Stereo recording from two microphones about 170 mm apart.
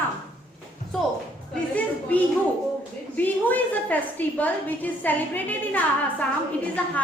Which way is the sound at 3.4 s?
10° left (ahead or behind).